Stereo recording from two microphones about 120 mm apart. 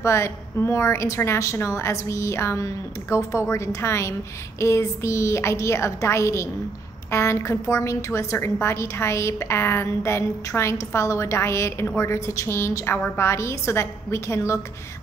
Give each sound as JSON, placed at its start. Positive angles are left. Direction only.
{"t": 0.0, "sound": "a woman's voice", "side_deg": 25}